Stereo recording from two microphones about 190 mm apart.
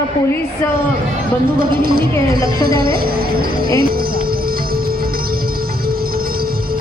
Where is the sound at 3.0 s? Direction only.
50° right (ahead or behind).